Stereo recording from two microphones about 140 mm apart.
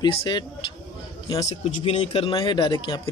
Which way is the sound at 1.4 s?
50° left (ahead or behind).